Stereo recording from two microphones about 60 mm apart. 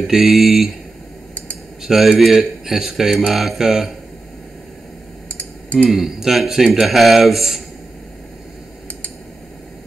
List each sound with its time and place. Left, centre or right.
0.0 s a man's voice: centre
1.8 s a man's voice: centre
5.4 s typing: left
5.9 s a man's voice: centre